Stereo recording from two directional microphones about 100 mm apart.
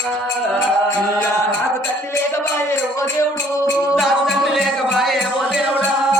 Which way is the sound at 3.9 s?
Centre (ahead or behind).